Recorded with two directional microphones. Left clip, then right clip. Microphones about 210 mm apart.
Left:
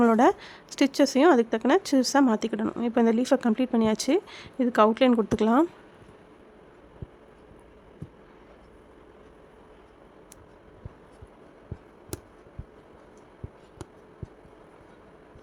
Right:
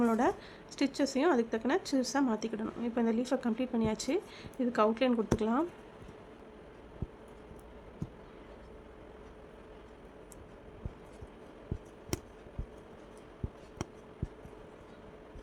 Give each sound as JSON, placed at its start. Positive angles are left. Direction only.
{"t": 0.0, "sound": "speech", "side_deg": 45}